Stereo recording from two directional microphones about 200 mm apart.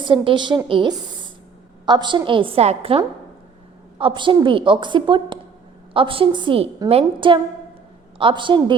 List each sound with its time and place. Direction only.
0.0 s a woman's voice: 25° right (ahead or behind)